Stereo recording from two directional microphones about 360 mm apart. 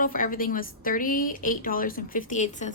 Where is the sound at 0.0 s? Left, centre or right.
Left.